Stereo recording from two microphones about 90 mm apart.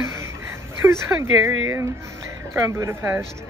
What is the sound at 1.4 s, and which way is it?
Speech, 30° right (ahead or behind).